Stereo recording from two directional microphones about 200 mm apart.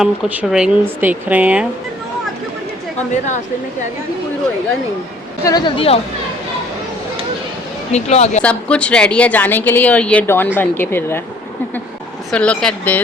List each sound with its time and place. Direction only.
0.0 s speech: 5° right (ahead or behind)
3.1 s speech: 35° left (ahead or behind)
5.4 s a woman's voice: 20° left (ahead or behind)
7.9 s speech: 35° left (ahead or behind)
8.4 s a woman's voice: 5° left (ahead or behind)
12.3 s speech: 5° left (ahead or behind)